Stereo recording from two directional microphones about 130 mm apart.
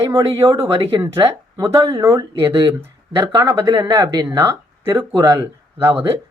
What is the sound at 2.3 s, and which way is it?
Speech, 40° right (ahead or behind).